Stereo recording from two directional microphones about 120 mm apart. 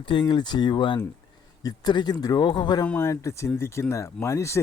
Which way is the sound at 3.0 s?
25° left (ahead or behind).